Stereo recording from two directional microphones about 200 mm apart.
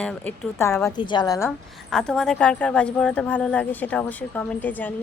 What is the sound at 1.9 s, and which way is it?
A woman's voice, 5° left (ahead or behind).